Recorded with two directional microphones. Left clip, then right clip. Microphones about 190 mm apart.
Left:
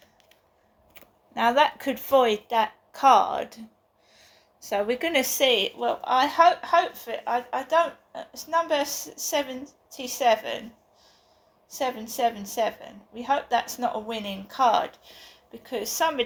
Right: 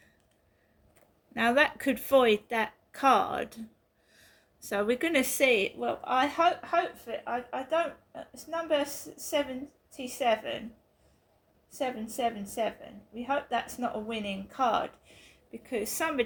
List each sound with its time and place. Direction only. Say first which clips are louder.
1.3 s a woman's voice: left 4 dB; 60° right (ahead or behind)
4.7 s a woman's voice: left 3 dB; 55° right (ahead or behind); by 10.6 s 40° right (ahead or behind)
11.7 s a woman's voice: left 5 dB; 45° right (ahead or behind); by 16.1 s 60° right (ahead or behind)